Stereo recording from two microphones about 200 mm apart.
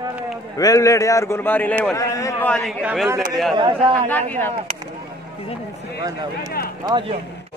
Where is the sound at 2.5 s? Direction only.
5° right (ahead or behind).